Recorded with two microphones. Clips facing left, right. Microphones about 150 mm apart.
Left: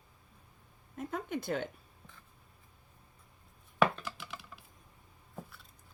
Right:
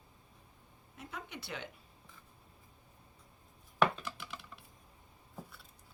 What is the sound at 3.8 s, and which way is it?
Computer keyboard, centre (ahead or behind).